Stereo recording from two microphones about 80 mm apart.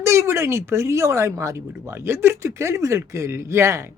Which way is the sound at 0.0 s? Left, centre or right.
Right.